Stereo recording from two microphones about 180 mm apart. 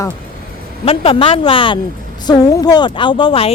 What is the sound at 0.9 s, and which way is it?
A woman's voice, 30° left (ahead or behind).